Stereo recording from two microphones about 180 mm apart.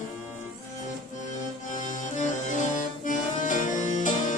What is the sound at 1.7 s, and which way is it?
Music, 45° left (ahead or behind).